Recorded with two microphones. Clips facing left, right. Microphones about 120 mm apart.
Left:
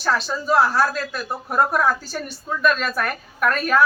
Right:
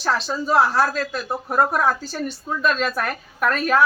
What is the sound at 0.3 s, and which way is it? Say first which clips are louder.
Speech: right 1 dB; 20° right (ahead or behind).